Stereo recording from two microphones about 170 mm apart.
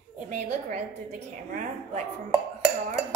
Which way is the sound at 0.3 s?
40° right (ahead or behind).